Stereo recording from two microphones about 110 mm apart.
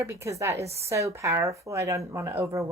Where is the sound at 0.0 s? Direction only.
25° right (ahead or behind).